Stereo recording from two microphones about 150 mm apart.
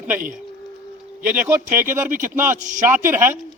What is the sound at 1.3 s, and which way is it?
Speech, 10° right (ahead or behind).